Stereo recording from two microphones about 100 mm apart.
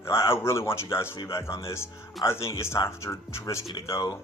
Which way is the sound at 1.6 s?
25° left (ahead or behind).